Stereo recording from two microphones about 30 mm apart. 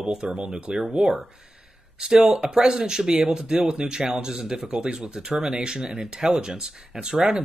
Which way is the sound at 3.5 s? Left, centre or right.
Right.